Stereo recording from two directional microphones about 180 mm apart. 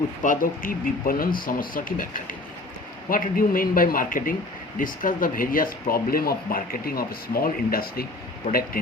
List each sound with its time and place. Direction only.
0.2 s speech: 50° left (ahead or behind)